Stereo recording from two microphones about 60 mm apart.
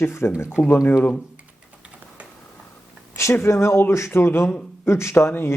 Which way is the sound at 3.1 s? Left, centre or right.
Left.